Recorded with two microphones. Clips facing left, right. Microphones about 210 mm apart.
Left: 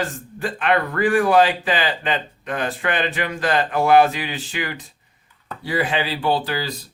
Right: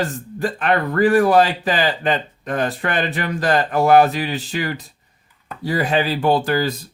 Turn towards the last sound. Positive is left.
turn(degrees=-45)  # may be behind; listen again after turning